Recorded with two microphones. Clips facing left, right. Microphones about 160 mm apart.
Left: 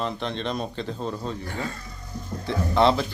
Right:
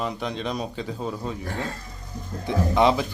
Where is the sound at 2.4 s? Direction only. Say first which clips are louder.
Right 1 dB; 15° right (ahead or behind).